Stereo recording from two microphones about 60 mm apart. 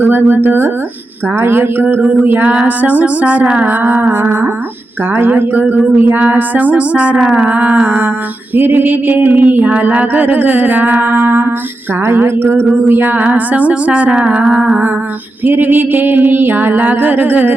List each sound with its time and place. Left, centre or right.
0.0 s music: right
2.6 s a sound: right
3.6 s music: right
5.1 s a sound: right
11.0 s music: right
12.0 s music: right
13.2 s a sound: right
14.3 s music: centre
15.4 s music: right